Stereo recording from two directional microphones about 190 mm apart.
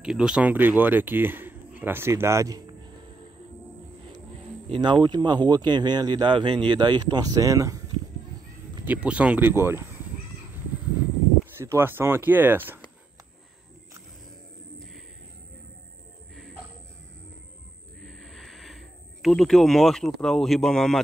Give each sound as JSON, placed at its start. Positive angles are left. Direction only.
{"t": 0.0, "sound": "speech", "side_deg": -5}
{"t": 4.6, "sound": "speech", "side_deg": -30}
{"t": 8.8, "sound": "speech", "side_deg": -10}
{"t": 11.5, "sound": "speech", "side_deg": -15}
{"t": 18.0, "sound": "a sound", "side_deg": 0}